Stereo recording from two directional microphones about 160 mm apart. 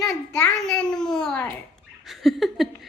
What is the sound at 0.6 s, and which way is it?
A woman's voice, 5° left (ahead or behind).